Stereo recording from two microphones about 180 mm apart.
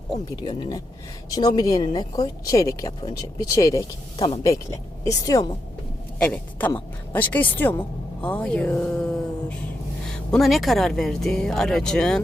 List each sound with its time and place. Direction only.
0.3 s speech: 25° left (ahead or behind); by 12.2 s 5° left (ahead or behind)